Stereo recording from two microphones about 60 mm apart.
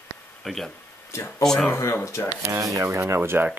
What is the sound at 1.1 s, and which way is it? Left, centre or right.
Speech, left.